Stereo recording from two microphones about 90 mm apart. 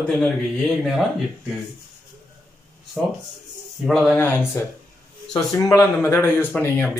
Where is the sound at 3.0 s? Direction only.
20° right (ahead or behind).